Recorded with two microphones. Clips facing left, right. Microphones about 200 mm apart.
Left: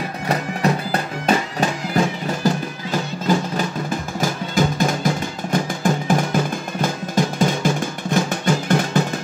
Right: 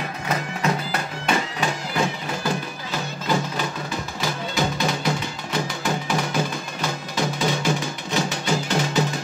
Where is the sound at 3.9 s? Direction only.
50° left (ahead or behind).